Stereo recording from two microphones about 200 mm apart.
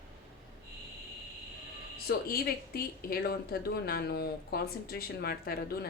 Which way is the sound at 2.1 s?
50° left (ahead or behind).